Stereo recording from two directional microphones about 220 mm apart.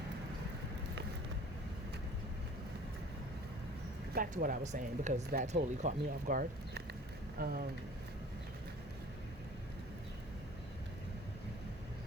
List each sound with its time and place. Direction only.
4.1 s speech: 40° right (ahead or behind)